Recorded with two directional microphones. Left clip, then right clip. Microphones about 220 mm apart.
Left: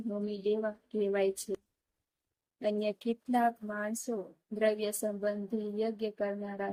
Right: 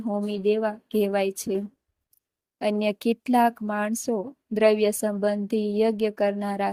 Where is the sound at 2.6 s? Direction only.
30° right (ahead or behind).